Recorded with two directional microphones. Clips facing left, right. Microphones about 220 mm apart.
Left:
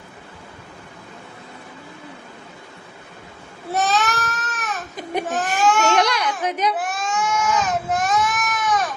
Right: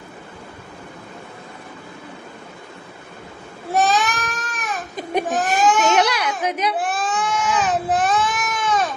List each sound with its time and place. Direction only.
3.7 s baby cry: 15° right (ahead or behind)
6.7 s baby cry: 30° right (ahead or behind)